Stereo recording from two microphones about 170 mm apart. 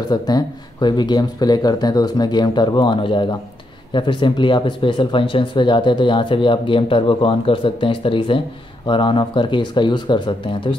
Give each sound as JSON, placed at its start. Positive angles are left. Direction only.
{"t": 0.1, "sound": "speech", "side_deg": 25}